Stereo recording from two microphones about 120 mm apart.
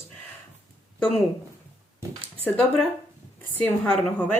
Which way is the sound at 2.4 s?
5° left (ahead or behind).